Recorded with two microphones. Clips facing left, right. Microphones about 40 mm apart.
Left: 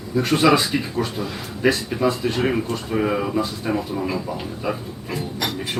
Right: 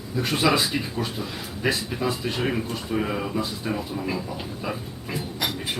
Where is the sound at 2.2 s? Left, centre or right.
Centre.